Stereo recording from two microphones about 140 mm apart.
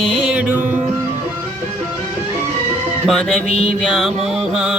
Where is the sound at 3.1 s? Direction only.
5° left (ahead or behind).